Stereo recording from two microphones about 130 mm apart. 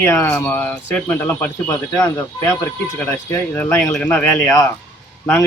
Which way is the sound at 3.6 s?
15° left (ahead or behind).